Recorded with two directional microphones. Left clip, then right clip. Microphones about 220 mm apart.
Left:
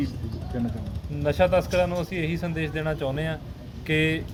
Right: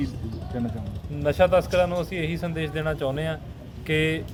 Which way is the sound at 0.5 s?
45° right (ahead or behind).